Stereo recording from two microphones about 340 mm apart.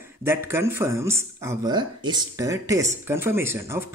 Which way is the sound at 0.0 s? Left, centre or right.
Centre.